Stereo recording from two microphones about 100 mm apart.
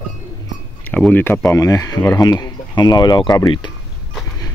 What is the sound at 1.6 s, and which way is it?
Speech, 35° left (ahead or behind).